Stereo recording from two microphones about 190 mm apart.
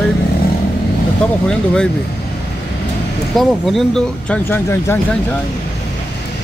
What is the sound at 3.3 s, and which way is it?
Speech, centre (ahead or behind).